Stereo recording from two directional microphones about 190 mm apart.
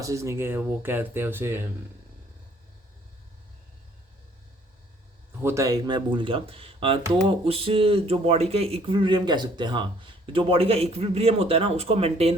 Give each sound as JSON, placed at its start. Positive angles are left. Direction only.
{"t": 0.0, "sound": "speech", "side_deg": -15}
{"t": 5.4, "sound": "speech", "side_deg": -15}